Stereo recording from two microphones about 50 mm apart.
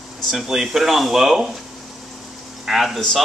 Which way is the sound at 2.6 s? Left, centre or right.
Centre.